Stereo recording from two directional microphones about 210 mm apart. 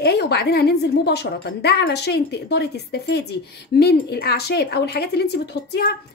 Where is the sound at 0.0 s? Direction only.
50° left (ahead or behind).